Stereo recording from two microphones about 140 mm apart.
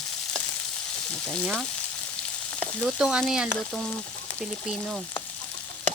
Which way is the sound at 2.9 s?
5° right (ahead or behind).